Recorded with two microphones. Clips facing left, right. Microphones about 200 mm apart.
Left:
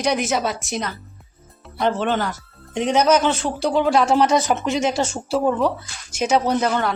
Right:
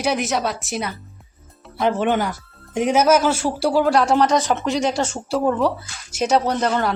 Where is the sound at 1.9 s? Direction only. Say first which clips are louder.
Right 2 dB; 15° right (ahead or behind).